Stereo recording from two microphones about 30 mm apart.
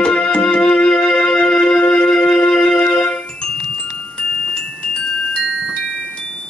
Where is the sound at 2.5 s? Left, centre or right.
Centre.